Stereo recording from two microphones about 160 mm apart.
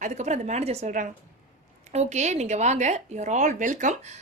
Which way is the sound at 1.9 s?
45° right (ahead or behind).